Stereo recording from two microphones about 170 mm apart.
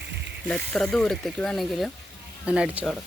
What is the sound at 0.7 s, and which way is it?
Speech, 5° left (ahead or behind).